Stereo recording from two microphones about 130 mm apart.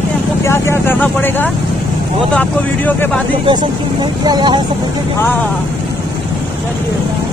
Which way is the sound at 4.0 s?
35° right (ahead or behind).